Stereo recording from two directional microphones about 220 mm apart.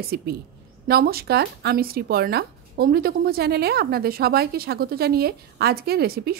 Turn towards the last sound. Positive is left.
turn(degrees=-45)  # may be behind; listen again after turning